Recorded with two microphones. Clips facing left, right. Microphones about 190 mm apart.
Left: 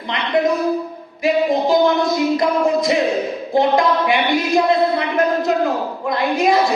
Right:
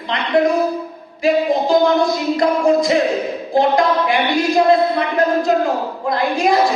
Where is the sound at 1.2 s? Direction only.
20° left (ahead or behind).